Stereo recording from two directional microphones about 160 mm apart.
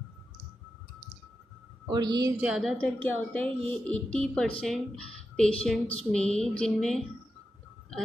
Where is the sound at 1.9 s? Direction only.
25° right (ahead or behind).